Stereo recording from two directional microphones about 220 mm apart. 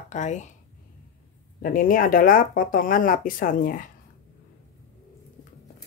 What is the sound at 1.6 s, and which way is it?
Speech, 40° left (ahead or behind).